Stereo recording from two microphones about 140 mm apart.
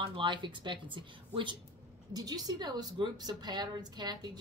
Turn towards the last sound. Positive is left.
turn(degrees=-30)  # may be behind; listen again after turning